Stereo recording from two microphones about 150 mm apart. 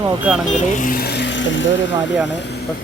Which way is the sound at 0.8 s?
70° left (ahead or behind).